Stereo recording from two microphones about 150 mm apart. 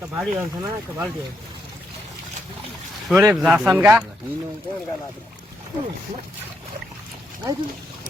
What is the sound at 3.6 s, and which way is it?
Speech, 15° right (ahead or behind).